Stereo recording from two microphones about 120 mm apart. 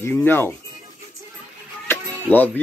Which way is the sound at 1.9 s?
15° left (ahead or behind).